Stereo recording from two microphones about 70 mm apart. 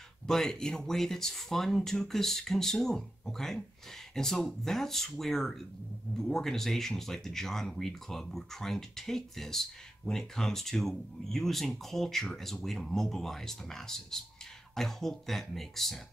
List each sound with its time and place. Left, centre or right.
0.3 s speech: centre